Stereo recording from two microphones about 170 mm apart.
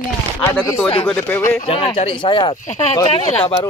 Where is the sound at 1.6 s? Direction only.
35° left (ahead or behind).